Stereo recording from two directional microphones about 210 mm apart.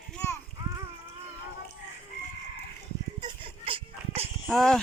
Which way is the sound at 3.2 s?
25° right (ahead or behind).